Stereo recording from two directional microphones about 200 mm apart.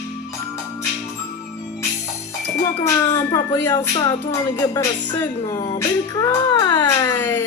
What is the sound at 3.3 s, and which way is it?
Music, 10° left (ahead or behind).